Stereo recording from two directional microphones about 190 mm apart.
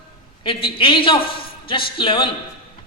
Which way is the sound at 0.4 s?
25° left (ahead or behind).